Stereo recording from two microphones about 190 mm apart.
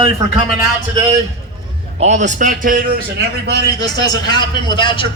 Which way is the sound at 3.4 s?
65° right (ahead or behind).